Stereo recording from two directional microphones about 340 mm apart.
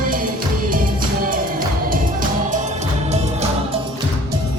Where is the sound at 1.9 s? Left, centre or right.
Right.